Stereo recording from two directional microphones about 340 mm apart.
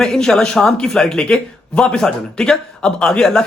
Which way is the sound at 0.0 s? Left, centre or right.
Centre.